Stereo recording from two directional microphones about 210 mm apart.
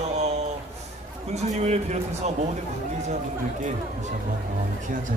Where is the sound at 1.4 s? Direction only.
35° right (ahead or behind).